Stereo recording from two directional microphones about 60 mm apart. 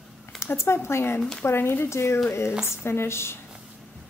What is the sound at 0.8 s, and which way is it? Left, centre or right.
A woman's voice, left.